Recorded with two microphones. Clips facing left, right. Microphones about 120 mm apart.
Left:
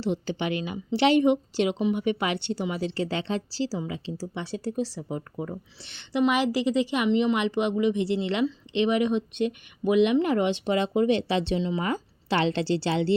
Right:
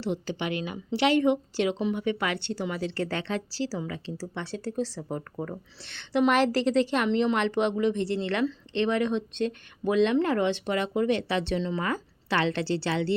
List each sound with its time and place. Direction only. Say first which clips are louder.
0.0 s a woman's voice: left 2 dB; 25° left (ahead or behind)